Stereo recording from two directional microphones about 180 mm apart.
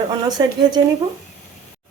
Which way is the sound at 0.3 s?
25° right (ahead or behind).